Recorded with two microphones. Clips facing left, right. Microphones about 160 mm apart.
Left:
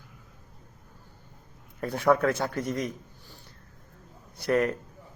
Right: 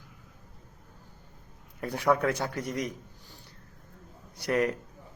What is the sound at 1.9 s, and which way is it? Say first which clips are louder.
Speech: left 3 dB; 15° right (ahead or behind).